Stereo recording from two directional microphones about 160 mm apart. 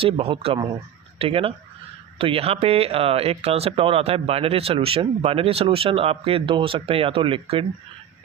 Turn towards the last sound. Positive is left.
turn(degrees=-35)  # may be behind; listen again after turning